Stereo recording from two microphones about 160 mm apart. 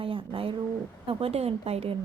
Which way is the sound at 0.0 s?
35° right (ahead or behind).